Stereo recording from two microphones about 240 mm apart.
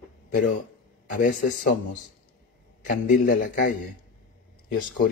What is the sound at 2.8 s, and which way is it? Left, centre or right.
Speech, left.